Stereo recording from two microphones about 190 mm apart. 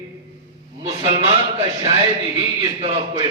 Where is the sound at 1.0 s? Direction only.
30° right (ahead or behind).